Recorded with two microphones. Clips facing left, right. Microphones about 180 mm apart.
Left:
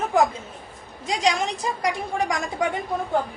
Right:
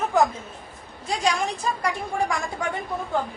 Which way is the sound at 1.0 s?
15° left (ahead or behind).